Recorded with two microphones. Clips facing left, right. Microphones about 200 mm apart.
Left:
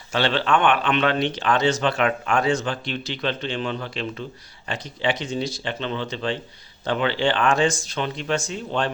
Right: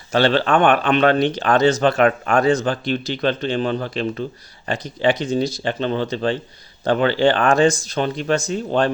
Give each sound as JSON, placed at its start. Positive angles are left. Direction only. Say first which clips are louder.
{"t": 0.1, "sound": "speech", "louder": "right 5 dB", "side_deg": -40}